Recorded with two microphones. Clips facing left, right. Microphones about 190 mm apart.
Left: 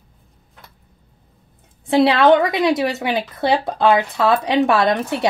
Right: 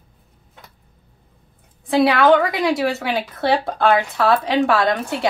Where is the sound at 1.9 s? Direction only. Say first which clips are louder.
Left 1 dB; 25° left (ahead or behind).